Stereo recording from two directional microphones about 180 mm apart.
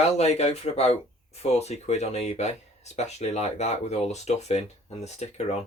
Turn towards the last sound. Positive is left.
turn(degrees=35)  # may be behind; listen again after turning